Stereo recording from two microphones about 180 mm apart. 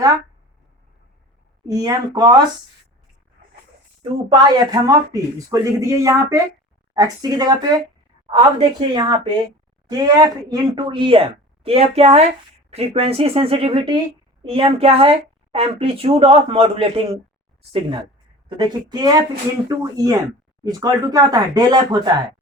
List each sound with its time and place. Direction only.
1.6 s speech: 20° right (ahead or behind)
4.3 s speech: 25° right (ahead or behind)